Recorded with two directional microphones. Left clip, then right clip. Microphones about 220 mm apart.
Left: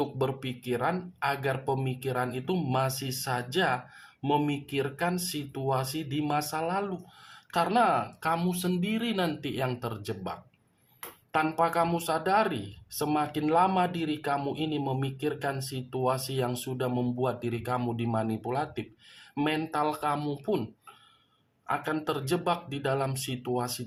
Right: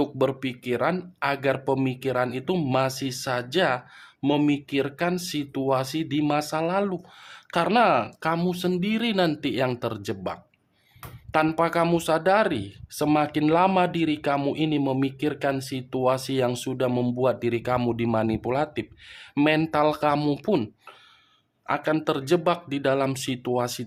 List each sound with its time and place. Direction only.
0.0 s speech: 40° right (ahead or behind)
21.7 s speech: 40° right (ahead or behind)